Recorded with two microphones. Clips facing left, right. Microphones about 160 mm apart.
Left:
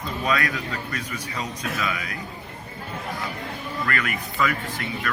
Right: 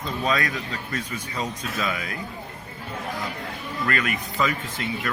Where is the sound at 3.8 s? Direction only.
25° right (ahead or behind).